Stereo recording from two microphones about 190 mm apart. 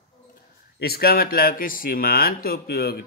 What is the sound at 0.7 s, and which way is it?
Speech, 55° left (ahead or behind).